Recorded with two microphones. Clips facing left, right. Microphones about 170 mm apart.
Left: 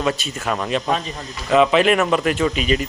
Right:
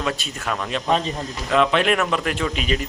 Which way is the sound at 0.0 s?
5° left (ahead or behind).